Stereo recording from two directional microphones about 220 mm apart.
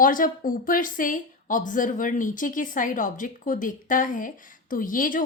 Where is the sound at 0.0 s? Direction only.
40° left (ahead or behind).